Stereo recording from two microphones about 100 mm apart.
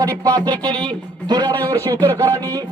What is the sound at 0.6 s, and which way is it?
Speech, 45° right (ahead or behind).